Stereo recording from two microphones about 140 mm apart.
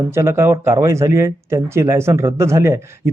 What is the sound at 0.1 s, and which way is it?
Speech, 20° right (ahead or behind).